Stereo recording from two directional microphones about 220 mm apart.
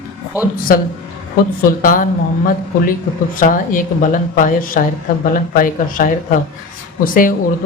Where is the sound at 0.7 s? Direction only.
40° left (ahead or behind).